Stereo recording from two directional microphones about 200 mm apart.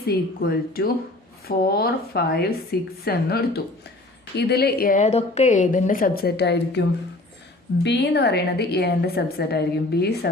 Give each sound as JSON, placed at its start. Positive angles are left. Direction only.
{"t": 0.0, "sound": "a woman's voice", "side_deg": 50}
{"t": 7.9, "sound": "a woman's voice", "side_deg": 60}